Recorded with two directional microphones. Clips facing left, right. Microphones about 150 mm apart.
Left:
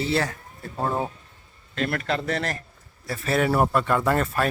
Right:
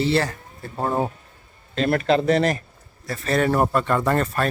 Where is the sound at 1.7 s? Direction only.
25° right (ahead or behind).